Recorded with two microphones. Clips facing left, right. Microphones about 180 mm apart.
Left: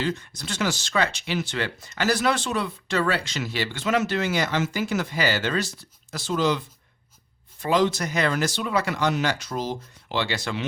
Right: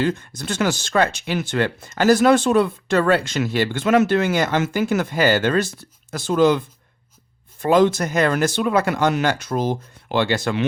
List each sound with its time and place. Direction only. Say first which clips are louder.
0.0 s speech: right 6 dB; 50° right (ahead or behind)
7.6 s speech: right 6 dB; 50° right (ahead or behind)